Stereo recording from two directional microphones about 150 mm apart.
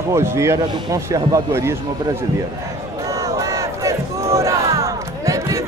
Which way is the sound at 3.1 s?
20° right (ahead or behind).